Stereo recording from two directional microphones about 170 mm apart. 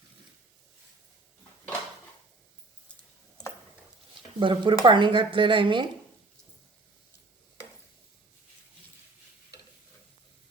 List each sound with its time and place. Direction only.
4.4 s speech: 30° right (ahead or behind)